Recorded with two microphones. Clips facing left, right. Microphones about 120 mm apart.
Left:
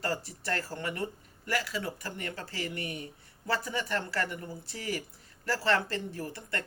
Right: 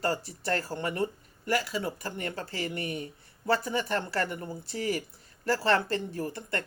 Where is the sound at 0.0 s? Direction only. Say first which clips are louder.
Right 4 dB; 30° right (ahead or behind).